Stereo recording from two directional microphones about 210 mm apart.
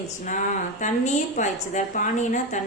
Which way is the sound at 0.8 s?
35° left (ahead or behind).